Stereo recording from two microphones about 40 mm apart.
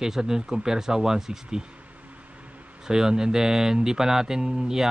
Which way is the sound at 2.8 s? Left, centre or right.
Centre.